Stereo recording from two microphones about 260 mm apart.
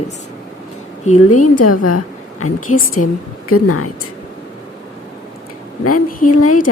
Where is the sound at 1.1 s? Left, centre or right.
Left.